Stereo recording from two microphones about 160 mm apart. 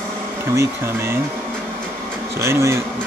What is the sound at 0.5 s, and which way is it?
Speech, 15° right (ahead or behind).